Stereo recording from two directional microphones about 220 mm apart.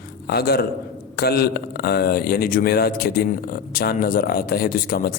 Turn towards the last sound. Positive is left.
turn(degrees=40)  # may be behind; listen again after turning